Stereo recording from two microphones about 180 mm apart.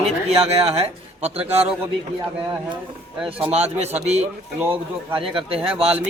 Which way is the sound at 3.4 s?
35° right (ahead or behind).